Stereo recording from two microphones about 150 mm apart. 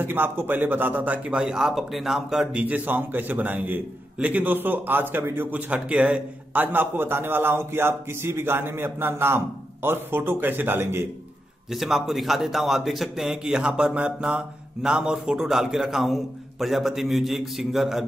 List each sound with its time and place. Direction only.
0.0 s speech: 15° right (ahead or behind)
11.7 s a man's voice: centre (ahead or behind)